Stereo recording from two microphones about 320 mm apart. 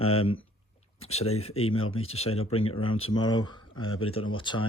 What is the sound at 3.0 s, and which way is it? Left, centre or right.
Speech, centre.